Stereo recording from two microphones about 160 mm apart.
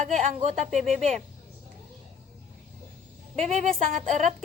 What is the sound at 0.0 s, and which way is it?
Speech, 45° right (ahead or behind).